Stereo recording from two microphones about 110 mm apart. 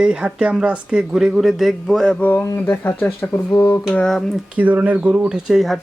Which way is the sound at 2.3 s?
20° left (ahead or behind).